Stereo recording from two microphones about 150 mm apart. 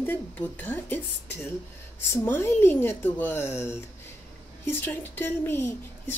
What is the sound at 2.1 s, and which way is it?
A woman's voice, 15° left (ahead or behind).